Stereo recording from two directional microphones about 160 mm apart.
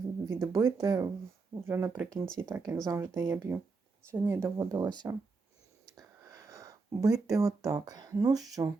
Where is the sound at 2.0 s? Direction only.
5° left (ahead or behind).